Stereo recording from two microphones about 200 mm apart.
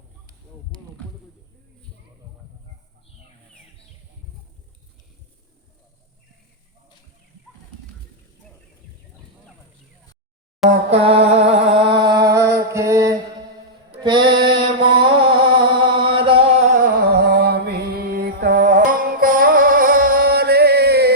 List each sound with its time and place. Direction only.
10.6 s a sound: centre (ahead or behind)
10.9 s music: 30° right (ahead or behind)
14.0 s mantra: 25° right (ahead or behind)
15.2 s music: 25° right (ahead or behind)
16.7 s music: 45° right (ahead or behind)